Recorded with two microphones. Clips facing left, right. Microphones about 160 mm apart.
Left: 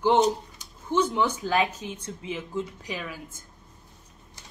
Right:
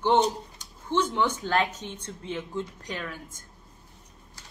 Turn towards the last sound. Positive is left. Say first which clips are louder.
# left 1 dB
turn(degrees=5)  # may be behind; listen again after turning